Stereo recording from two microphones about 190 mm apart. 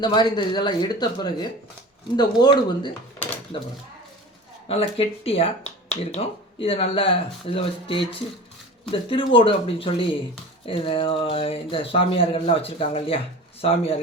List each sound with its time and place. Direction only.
0.0 s speech: 25° left (ahead or behind)
4.7 s speech: 30° left (ahead or behind)